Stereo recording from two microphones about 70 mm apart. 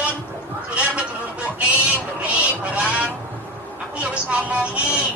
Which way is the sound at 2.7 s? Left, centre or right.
Centre.